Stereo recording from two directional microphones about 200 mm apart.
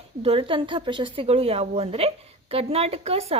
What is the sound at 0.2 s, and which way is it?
A woman's voice, 30° right (ahead or behind).